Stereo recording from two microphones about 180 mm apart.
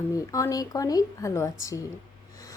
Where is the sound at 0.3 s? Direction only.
15° left (ahead or behind).